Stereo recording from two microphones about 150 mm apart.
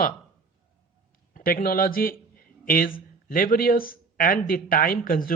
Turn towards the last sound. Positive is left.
turn(degrees=70)  # may be behind; listen again after turning